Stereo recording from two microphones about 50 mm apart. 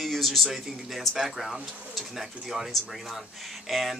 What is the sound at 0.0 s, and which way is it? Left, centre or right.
Speech, centre.